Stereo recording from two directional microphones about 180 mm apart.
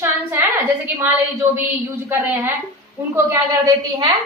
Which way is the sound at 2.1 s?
10° right (ahead or behind).